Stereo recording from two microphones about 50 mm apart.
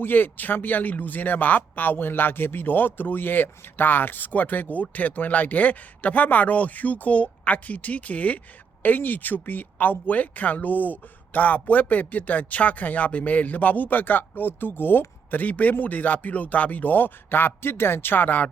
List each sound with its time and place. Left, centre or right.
0.0 s speech: left